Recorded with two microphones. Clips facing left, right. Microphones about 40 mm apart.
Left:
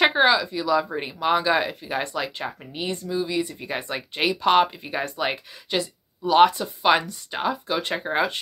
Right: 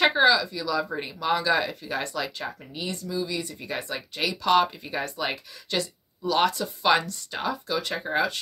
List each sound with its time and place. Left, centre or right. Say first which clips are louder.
0.0 s speech: left 1 dB; centre
6.9 s speech: left 2 dB; centre
7.2 s speech: left 4 dB; left